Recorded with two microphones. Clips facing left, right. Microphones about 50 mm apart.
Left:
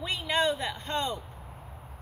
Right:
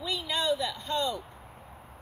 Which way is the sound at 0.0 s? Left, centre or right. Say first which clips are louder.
Left 3 dB; left.